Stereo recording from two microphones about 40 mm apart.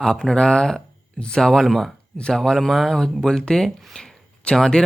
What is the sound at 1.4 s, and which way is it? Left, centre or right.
Speech, centre.